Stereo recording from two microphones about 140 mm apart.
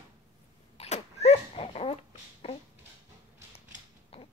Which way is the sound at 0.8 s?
50° left (ahead or behind).